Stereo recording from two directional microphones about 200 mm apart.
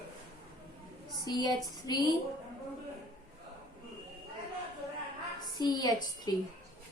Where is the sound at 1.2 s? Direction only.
20° left (ahead or behind).